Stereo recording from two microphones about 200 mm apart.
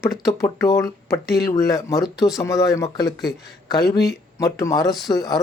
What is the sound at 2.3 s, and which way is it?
Speech, 15° left (ahead or behind).